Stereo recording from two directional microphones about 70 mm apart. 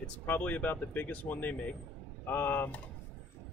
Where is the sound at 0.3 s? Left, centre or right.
Left.